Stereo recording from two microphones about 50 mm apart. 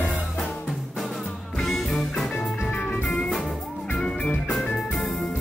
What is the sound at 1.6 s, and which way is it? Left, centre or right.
Music, centre.